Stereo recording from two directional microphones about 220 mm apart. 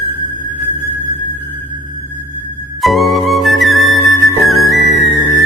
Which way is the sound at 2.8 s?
Centre (ahead or behind).